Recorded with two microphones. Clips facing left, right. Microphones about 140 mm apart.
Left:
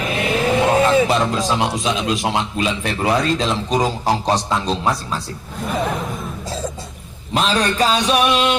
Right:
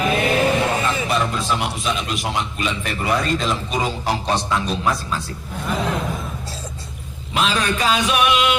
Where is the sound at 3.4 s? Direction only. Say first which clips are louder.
Left 4 dB; 35° left (ahead or behind).